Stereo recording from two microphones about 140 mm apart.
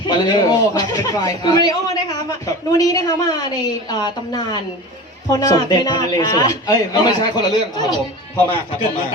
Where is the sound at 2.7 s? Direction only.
25° left (ahead or behind).